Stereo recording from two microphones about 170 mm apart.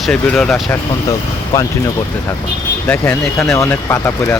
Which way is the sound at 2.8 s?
10° left (ahead or behind).